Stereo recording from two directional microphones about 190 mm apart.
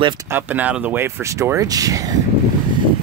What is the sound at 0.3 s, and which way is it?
Speech, 10° right (ahead or behind).